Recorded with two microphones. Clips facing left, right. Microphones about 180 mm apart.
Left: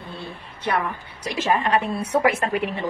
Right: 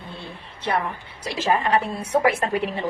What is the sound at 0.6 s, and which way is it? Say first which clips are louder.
A woman's voice: even; 25° right (ahead or behind).